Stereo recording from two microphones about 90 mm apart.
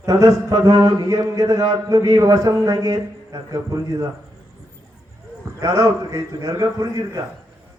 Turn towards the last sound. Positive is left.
turn(degrees=-40)  # may be behind; listen again after turning